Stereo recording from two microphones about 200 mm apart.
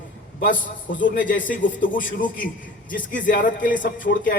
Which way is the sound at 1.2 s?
45° left (ahead or behind).